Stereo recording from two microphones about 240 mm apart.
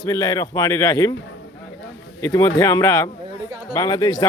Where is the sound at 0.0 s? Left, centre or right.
Centre.